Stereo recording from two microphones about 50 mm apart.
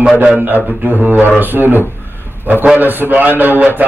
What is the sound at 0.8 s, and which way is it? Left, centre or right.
A man's voice, right.